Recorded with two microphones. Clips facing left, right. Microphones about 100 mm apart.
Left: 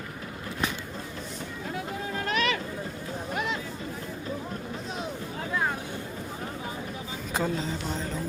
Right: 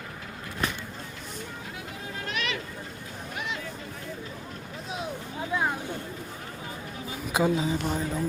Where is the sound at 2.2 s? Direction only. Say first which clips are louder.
Left 5 dB; 40° left (ahead or behind).